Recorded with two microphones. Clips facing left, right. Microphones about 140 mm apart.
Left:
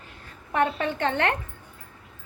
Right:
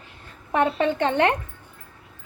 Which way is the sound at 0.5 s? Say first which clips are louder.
Right 4 dB; 20° right (ahead or behind).